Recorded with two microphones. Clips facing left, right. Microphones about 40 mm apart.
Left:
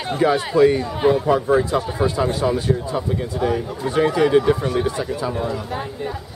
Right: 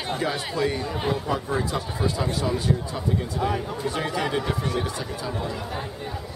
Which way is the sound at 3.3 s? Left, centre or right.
Centre.